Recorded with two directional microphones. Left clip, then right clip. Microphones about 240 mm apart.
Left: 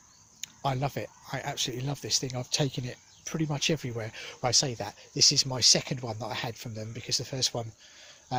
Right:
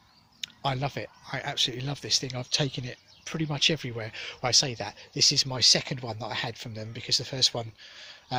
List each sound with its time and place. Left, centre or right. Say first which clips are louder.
0.4 s speech: right 1 dB; centre